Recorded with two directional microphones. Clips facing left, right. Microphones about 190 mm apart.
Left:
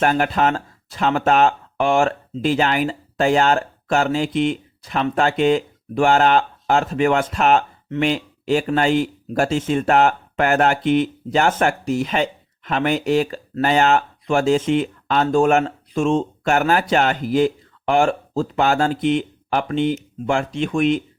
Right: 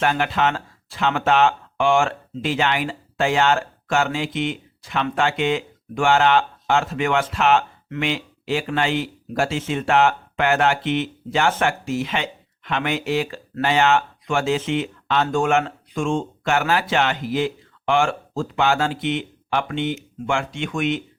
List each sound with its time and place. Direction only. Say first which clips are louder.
0.0 s speech: left 3 dB; 40° left (ahead or behind)